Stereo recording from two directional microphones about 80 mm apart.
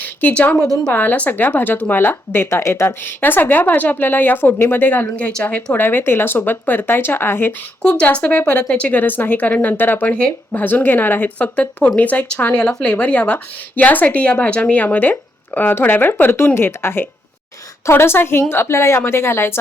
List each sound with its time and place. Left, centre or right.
0.2 s speech: centre
7.8 s speech: centre; by 19.5 s left